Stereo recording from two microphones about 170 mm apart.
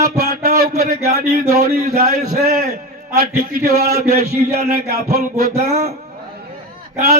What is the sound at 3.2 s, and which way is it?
Speech, 65° right (ahead or behind).